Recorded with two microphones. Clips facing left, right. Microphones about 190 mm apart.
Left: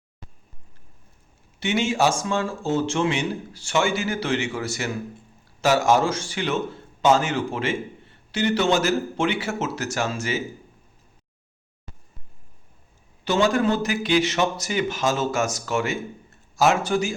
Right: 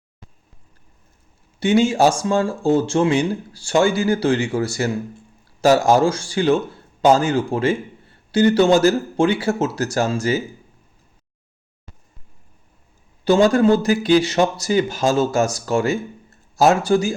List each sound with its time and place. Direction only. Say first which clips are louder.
1.5 s a man's voice: right 7 dB; 35° right (ahead or behind)
13.2 s speech: right 6 dB; 35° right (ahead or behind)